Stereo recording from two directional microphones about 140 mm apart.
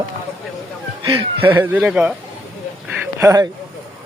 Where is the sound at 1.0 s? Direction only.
25° right (ahead or behind).